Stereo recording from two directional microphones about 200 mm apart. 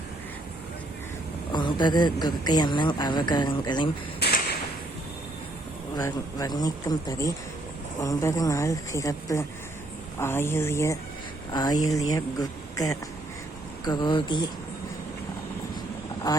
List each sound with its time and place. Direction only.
1.5 s speech: 20° left (ahead or behind)
4.2 s whip: 55° left (ahead or behind)
6.0 s a woman's voice: 20° left (ahead or behind)
16.3 s speech: 20° left (ahead or behind)